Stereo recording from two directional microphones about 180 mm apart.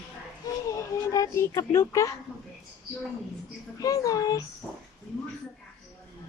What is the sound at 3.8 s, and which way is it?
Speech, 20° left (ahead or behind).